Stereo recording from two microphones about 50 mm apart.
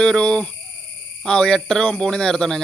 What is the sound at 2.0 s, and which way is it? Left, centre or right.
Speech, centre.